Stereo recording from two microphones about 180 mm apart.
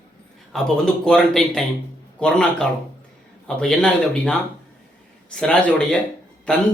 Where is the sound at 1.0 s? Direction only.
5° left (ahead or behind).